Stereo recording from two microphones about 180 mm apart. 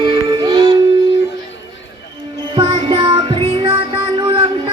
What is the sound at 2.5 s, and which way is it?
Music, 25° right (ahead or behind).